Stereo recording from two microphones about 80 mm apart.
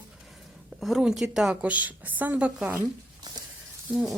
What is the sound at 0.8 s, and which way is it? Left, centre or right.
A woman's voice, centre.